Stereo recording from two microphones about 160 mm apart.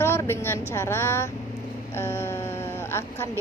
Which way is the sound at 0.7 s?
15° left (ahead or behind).